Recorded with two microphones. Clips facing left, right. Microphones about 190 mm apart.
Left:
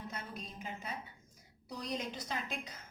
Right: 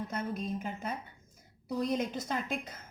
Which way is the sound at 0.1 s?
50° right (ahead or behind).